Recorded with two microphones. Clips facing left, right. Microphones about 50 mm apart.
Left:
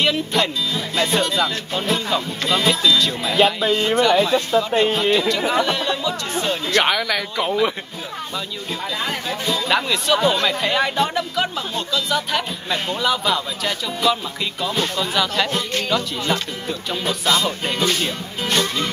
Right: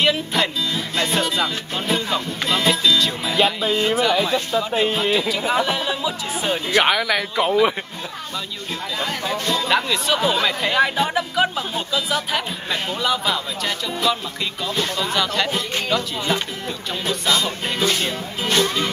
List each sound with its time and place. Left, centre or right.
0.0 s speech: centre
9.3 s speech: centre